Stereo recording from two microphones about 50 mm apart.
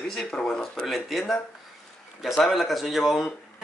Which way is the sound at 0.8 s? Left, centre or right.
Centre.